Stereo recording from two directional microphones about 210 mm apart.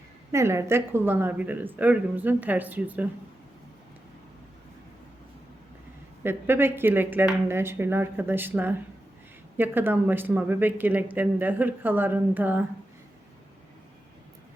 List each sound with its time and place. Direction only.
0.3 s speech: 15° right (ahead or behind)
6.2 s speech: 10° right (ahead or behind)